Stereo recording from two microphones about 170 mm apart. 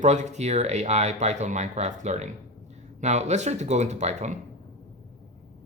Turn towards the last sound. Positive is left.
turn(degrees=-40)  # may be behind; listen again after turning